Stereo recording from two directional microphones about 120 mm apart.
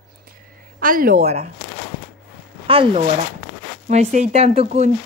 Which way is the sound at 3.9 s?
70° right (ahead or behind).